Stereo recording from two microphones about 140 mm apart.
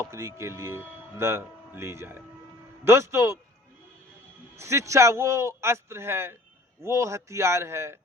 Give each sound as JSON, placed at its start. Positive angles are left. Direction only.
{"t": 0.0, "sound": "a man's voice", "side_deg": -20}
{"t": 4.5, "sound": "a man's voice", "side_deg": -20}